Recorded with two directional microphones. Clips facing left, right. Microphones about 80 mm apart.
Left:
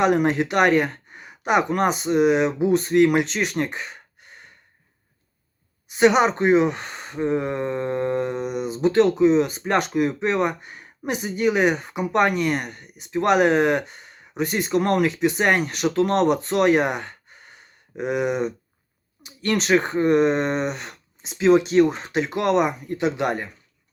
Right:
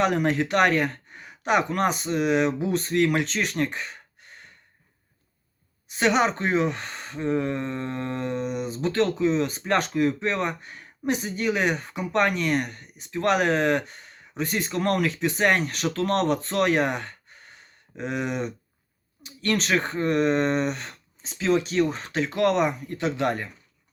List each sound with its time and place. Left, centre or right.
0.3 s speech: centre
1.1 s a sound: centre
2.0 s speech: centre
3.8 s sigh: centre
5.9 s speech: centre
9.5 s speech: centre
14.7 s speech: left
15.1 s speech: centre
15.9 s speech: left
16.2 s speech: centre
21.5 s speech: left
22.0 s speech: centre